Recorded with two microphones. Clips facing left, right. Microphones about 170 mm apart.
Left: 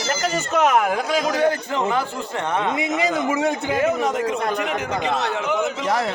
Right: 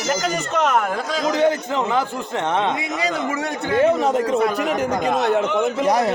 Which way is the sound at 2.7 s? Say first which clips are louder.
Left 2 dB; 20° left (ahead or behind).